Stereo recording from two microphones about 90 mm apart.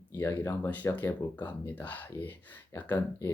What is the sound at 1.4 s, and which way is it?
Speech, 20° left (ahead or behind).